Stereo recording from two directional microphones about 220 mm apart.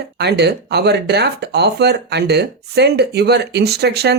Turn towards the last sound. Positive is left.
turn(degrees=-50)  # may be behind; listen again after turning